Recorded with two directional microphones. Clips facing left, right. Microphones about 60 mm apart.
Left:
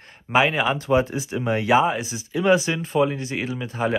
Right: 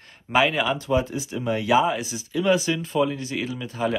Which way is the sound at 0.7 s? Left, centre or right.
Left.